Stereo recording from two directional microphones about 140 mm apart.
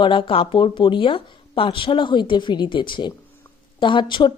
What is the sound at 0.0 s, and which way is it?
A woman's voice, 35° left (ahead or behind).